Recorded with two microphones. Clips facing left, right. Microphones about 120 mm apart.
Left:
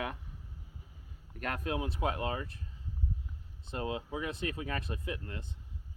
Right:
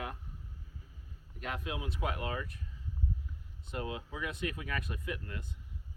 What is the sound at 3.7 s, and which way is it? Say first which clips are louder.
Speech: left 3 dB; 30° left (ahead or behind).